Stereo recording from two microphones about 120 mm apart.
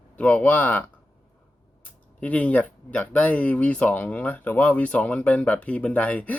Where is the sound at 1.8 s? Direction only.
10° left (ahead or behind).